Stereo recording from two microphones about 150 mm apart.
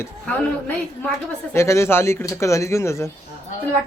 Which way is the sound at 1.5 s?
20° left (ahead or behind).